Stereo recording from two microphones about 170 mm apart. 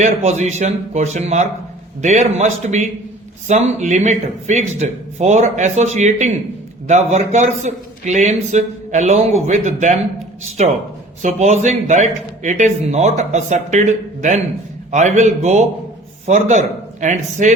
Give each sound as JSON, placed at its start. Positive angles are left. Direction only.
{"t": 0.0, "sound": "a man's voice", "side_deg": -40}